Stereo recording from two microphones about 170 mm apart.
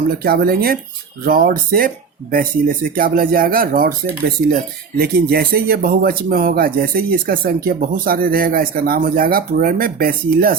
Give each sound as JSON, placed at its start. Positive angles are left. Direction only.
{"t": 0.2, "sound": "speech", "side_deg": -65}